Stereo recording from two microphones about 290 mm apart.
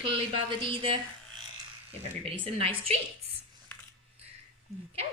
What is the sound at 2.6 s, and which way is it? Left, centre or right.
Speech, centre.